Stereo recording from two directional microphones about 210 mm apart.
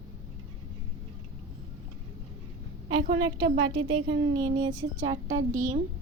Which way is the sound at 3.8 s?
90° right.